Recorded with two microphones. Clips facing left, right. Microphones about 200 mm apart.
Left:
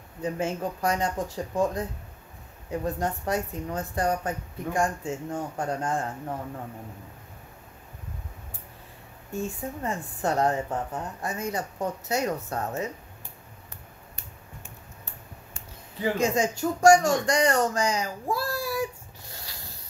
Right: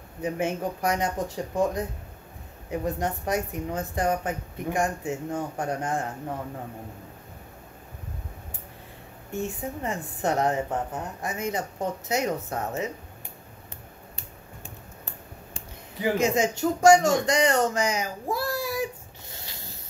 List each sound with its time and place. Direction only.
0.2 s a woman's voice: 20° right (ahead or behind)
9.3 s a woman's voice: 20° right (ahead or behind)
16.0 s a woman's voice: 20° right (ahead or behind)
19.3 s a sound: 25° right (ahead or behind)